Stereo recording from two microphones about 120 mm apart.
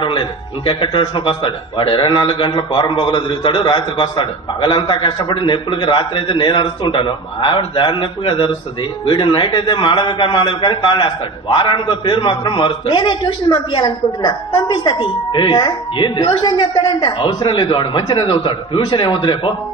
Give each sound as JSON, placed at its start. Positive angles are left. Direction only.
{"t": 0.0, "sound": "a man's voice", "side_deg": 45}